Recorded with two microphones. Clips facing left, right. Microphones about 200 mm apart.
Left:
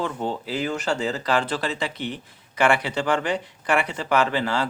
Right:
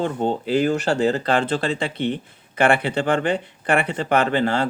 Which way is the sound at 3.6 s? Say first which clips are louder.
Right 3 dB; 60° right (ahead or behind).